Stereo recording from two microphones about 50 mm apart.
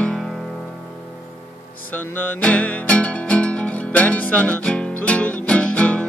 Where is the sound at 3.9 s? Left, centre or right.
Left.